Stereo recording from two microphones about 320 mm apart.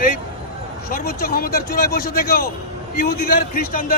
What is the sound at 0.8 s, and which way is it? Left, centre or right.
Speech, left.